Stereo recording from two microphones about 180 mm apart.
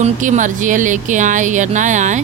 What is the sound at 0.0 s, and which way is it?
Speech, 45° right (ahead or behind).